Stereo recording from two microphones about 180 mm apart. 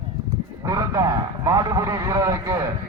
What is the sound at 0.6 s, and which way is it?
A man's voice, 20° right (ahead or behind).